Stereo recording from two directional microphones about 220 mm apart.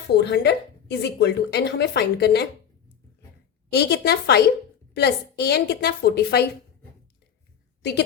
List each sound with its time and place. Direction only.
0.1 s a woman's voice: 50° left (ahead or behind)
3.7 s a woman's voice: 50° left (ahead or behind)